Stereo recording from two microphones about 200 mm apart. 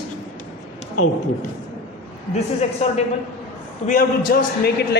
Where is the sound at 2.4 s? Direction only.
30° left (ahead or behind).